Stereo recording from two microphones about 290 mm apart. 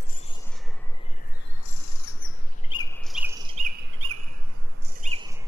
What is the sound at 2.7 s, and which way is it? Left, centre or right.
Chirp, centre.